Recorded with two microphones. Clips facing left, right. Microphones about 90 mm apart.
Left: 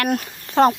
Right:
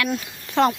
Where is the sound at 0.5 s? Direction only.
35° left (ahead or behind).